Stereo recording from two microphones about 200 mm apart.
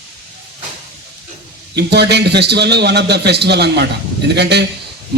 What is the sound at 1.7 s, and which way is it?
A man's voice, 55° right (ahead or behind).